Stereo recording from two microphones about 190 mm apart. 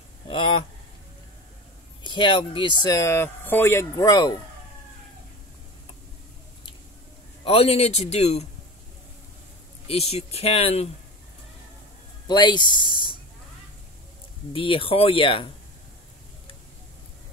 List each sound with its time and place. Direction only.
0.3 s speech: 25° left (ahead or behind)
2.0 s speech: 25° left (ahead or behind)
7.4 s speech: 30° left (ahead or behind)
9.8 s speech: 35° left (ahead or behind)
12.3 s speech: 25° left (ahead or behind)
14.5 s speech: 30° left (ahead or behind)